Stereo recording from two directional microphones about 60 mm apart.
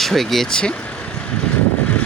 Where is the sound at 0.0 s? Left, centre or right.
Centre.